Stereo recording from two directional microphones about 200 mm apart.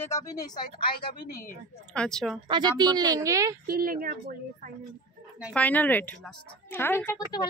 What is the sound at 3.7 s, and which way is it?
Speech, 45° right (ahead or behind).